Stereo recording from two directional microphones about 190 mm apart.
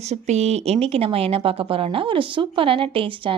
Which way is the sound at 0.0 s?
35° right (ahead or behind).